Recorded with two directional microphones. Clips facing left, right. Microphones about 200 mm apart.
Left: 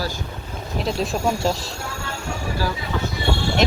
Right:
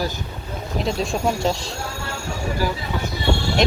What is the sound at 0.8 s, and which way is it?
Speech, centre (ahead or behind).